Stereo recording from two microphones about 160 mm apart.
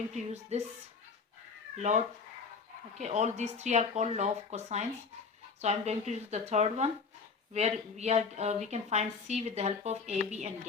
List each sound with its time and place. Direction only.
0.1 s speech: 45° right (ahead or behind)
2.9 s speech: 45° right (ahead or behind)